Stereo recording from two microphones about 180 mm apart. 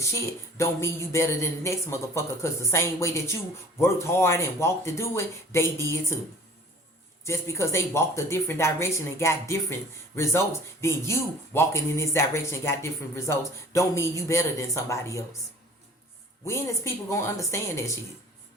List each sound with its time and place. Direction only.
0.0 s speech: 15° left (ahead or behind)
7.3 s speech: 15° left (ahead or behind)
16.5 s speech: 15° left (ahead or behind)